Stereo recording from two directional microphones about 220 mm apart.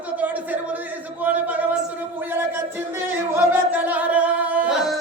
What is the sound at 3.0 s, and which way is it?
Singing, 10° right (ahead or behind).